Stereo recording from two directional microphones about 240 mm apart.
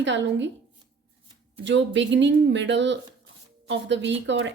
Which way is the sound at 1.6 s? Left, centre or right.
Right.